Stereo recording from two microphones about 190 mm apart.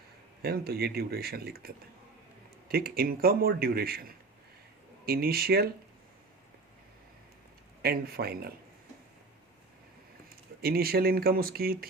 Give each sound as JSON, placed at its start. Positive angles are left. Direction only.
{"t": 0.4, "sound": "a man's voice", "side_deg": -55}
{"t": 7.8, "sound": "speech", "side_deg": -55}
{"t": 10.6, "sound": "a man's voice", "side_deg": -55}